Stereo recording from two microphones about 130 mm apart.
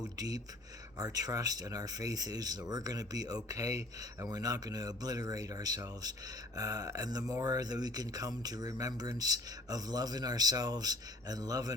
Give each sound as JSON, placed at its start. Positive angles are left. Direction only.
{"t": 0.2, "sound": "speech", "side_deg": -30}